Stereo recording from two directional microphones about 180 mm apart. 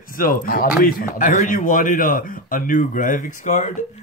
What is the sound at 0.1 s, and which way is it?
Speech, 50° left (ahead or behind).